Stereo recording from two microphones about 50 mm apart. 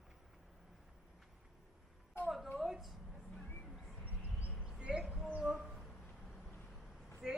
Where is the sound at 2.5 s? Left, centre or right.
Centre.